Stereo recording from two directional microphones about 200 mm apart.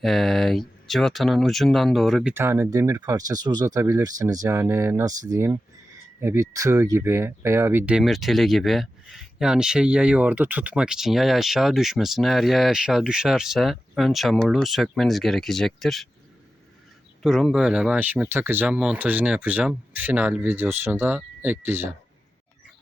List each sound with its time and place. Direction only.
0.0 s speech: centre (ahead or behind)
2.3 s speech: 10° right (ahead or behind)
17.2 s speech: centre (ahead or behind)